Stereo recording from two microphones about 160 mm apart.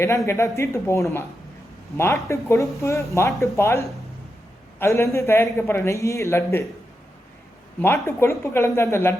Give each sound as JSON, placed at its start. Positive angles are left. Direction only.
{"t": 0.3, "sound": "speech", "side_deg": 15}
{"t": 8.0, "sound": "speech", "side_deg": 15}